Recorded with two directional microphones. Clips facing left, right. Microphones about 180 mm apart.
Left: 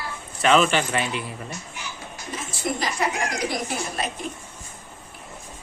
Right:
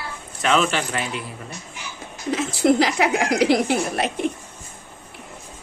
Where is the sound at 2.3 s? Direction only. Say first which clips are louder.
Right 11 dB; 75° right (ahead or behind).